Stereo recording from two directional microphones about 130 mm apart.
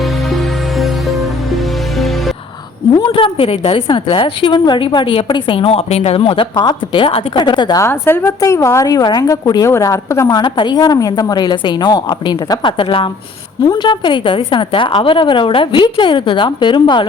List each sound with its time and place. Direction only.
3.0 s a woman's voice: 40° left (ahead or behind)
7.8 s a woman's voice: 20° left (ahead or behind); by 17.1 s 40° left (ahead or behind)